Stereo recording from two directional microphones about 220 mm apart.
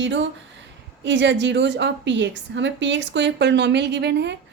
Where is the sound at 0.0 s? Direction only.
55° right (ahead or behind).